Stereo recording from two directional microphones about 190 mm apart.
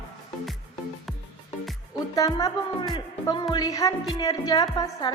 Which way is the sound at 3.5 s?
20° left (ahead or behind).